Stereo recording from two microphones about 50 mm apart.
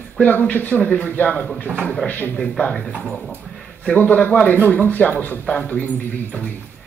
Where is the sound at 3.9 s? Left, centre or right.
Left.